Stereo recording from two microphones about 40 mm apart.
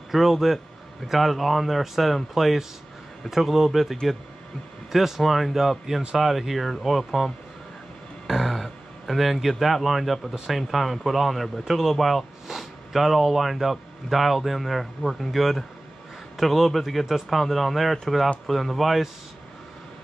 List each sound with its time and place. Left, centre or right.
0.1 s speech: centre